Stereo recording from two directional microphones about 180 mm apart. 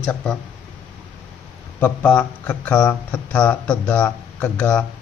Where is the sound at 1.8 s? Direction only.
10° left (ahead or behind).